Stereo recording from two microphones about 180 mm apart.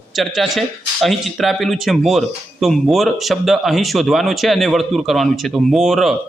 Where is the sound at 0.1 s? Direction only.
Centre (ahead or behind).